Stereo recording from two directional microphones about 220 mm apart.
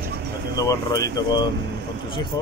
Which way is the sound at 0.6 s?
15° left (ahead or behind).